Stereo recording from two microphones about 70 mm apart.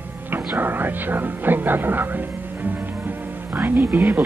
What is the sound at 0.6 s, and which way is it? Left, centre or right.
Speech, right.